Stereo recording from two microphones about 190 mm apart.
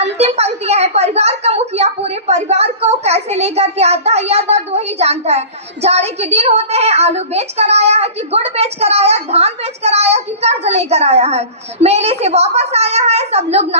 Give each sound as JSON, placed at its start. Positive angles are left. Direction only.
{"t": 0.0, "sound": "a woman's voice", "side_deg": -35}